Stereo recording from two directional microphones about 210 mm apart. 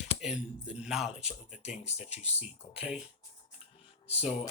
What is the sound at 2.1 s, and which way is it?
Speech, 30° left (ahead or behind).